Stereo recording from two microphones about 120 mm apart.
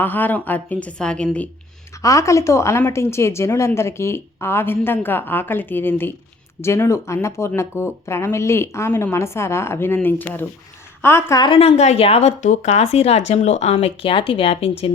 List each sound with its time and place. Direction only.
0.0 s a woman's voice: 15° left (ahead or behind)
2.0 s a woman's voice: 30° left (ahead or behind)
11.3 s a woman's voice: 45° left (ahead or behind); by 13.7 s 65° left (ahead or behind)
13.7 s speech: 50° left (ahead or behind)